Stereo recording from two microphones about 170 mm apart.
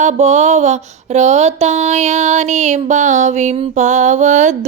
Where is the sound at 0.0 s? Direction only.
40° right (ahead or behind).